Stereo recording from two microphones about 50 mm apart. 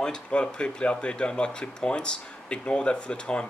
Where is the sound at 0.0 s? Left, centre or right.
Centre.